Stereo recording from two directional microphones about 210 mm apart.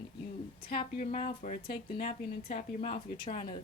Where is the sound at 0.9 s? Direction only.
35° left (ahead or behind).